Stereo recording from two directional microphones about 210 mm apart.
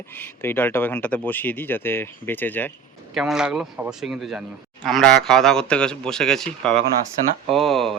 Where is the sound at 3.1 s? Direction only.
Centre (ahead or behind).